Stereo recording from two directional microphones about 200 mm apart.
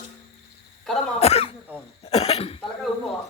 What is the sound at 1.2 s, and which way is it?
Throat clearing, 30° left (ahead or behind).